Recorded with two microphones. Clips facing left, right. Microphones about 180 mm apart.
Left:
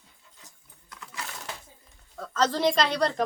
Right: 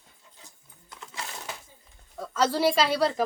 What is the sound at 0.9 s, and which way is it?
Coin, 25° right (ahead or behind).